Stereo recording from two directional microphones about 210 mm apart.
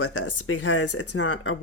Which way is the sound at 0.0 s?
90° left.